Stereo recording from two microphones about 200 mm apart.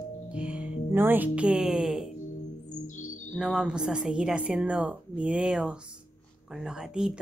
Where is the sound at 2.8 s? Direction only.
40° left (ahead or behind).